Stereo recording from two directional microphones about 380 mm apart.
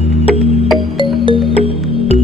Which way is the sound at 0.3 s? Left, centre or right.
Centre.